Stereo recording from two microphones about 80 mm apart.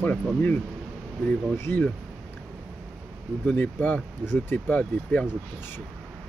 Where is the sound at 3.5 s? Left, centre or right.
Left.